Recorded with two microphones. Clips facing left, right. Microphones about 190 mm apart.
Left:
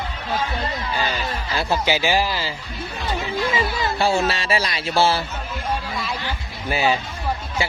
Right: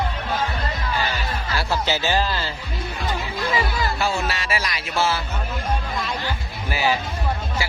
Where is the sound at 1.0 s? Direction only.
15° left (ahead or behind).